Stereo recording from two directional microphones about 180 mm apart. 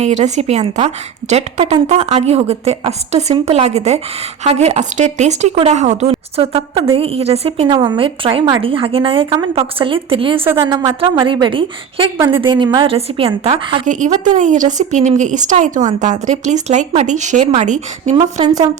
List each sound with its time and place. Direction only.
0.0 s a woman's voice: 40° right (ahead or behind)
13.8 s a woman's voice: 45° right (ahead or behind)